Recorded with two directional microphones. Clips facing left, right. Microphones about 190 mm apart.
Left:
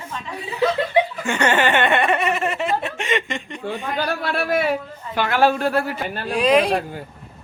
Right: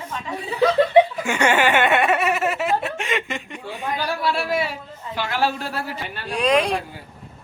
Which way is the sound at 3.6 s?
55° left (ahead or behind).